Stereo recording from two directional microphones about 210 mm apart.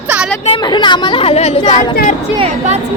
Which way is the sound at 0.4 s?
20° left (ahead or behind).